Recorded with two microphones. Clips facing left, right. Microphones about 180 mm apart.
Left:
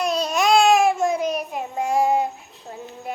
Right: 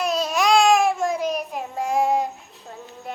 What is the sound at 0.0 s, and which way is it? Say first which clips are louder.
Babbling: left 1 dB; centre (ahead or behind).